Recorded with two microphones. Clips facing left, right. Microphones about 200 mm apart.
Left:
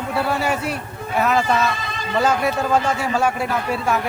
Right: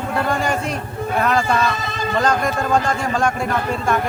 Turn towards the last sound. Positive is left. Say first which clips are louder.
# even
turn(degrees=5)  # may be behind; listen again after turning